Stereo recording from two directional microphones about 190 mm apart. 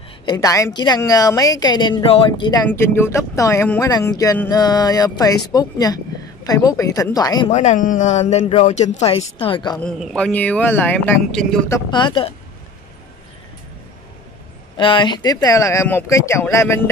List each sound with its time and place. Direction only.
0.2 s a woman's voice: 20° left (ahead or behind)
2.7 s a woman's voice: 15° left (ahead or behind)
7.5 s speech: 40° left (ahead or behind); by 9.8 s 25° left (ahead or behind)
9.8 s speech: centre (ahead or behind)
11.9 s a woman's voice: 25° left (ahead or behind)
14.8 s speech: 25° left (ahead or behind)